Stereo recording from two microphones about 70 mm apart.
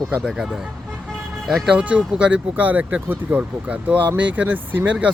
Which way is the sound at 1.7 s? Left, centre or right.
Centre.